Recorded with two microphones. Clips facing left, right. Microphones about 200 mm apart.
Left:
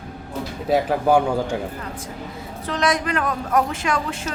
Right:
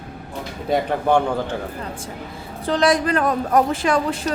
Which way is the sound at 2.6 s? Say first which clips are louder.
Right 4 dB; 30° right (ahead or behind).